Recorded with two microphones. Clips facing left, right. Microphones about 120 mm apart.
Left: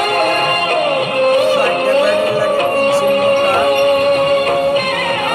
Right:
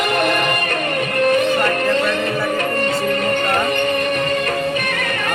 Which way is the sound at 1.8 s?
10° left (ahead or behind).